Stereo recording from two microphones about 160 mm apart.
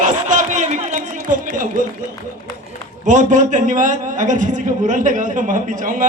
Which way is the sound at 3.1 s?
50° right (ahead or behind).